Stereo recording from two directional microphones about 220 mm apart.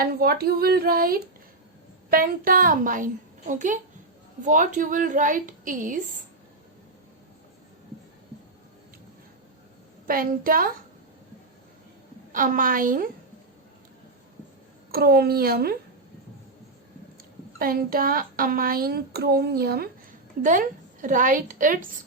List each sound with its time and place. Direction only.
0.0 s a woman's voice: 45° right (ahead or behind)
10.1 s a woman's voice: 40° right (ahead or behind)
12.3 s a woman's voice: 40° right (ahead or behind)
14.9 s speech: 45° right (ahead or behind)
17.6 s a woman's voice: 40° right (ahead or behind)